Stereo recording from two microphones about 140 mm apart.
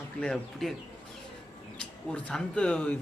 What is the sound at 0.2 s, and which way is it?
Speech, 5° left (ahead or behind).